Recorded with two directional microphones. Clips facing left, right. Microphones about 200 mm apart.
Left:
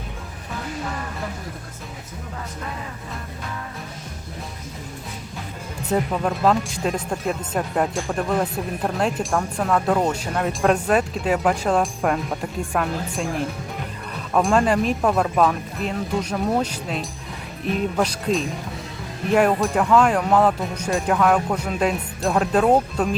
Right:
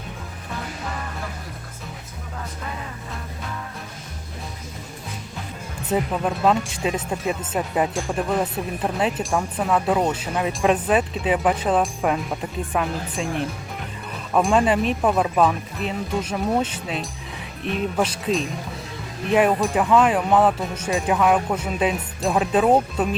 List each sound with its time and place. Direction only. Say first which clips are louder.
5.9 s speech: left 1 dB; centre (ahead or behind)